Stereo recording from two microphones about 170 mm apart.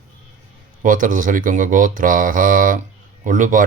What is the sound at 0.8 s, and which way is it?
Speech, 50° right (ahead or behind).